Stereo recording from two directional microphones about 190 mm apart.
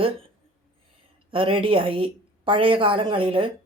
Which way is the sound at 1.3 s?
30° right (ahead or behind).